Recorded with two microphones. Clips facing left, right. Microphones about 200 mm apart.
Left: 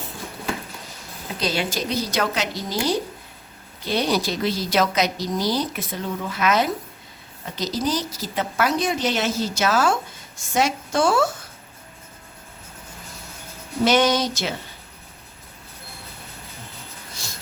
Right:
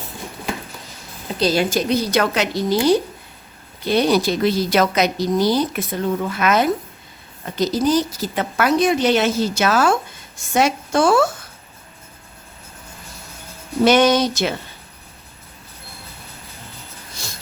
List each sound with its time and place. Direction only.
1.4 s a woman's voice: 40° right (ahead or behind)
1.9 s a woman's voice: 60° right (ahead or behind)
3.8 s a woman's voice: 55° right (ahead or behind)
13.8 s a woman's voice: 60° right (ahead or behind)